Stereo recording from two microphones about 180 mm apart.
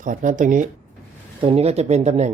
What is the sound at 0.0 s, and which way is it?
Speech, 45° right (ahead or behind).